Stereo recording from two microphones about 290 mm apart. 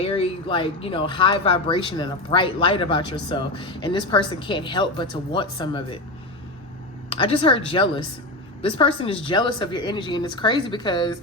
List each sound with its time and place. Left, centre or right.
0.0 s speech: centre
7.2 s speech: centre